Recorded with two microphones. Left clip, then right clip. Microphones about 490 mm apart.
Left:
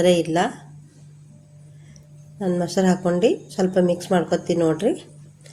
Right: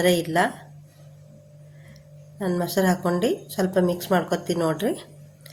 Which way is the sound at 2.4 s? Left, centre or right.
Right.